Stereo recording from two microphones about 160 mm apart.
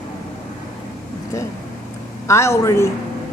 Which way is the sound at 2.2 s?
15° left (ahead or behind).